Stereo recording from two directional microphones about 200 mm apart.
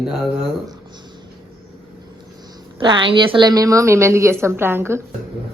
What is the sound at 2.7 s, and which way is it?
A woman's voice, 25° right (ahead or behind).